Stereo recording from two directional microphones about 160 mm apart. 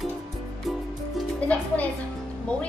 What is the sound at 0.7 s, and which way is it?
Music, centre (ahead or behind).